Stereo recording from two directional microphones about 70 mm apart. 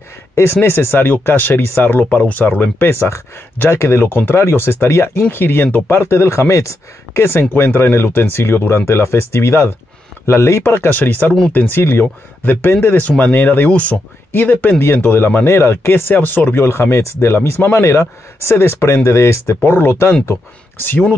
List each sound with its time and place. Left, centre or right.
0.4 s speech: left
2.9 s speech: left
15.4 s speech: left
19.6 s speech: left